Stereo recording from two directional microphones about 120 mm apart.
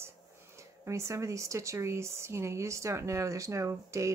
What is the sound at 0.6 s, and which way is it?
Speech, 25° right (ahead or behind).